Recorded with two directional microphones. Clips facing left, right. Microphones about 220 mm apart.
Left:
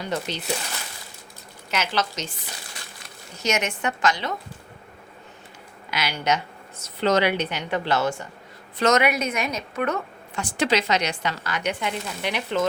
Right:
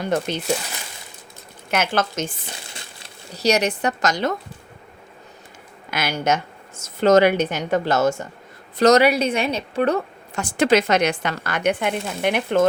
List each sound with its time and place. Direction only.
0.0 s speech: 50° right (ahead or behind)
1.7 s speech: 50° right (ahead or behind)
2.7 s speech: 30° right (ahead or behind)
5.9 s a woman's voice: 50° right (ahead or behind)
10.6 s speech: 50° right (ahead or behind)